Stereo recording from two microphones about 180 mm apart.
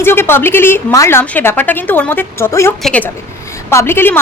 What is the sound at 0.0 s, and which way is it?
A woman's voice, 15° left (ahead or behind).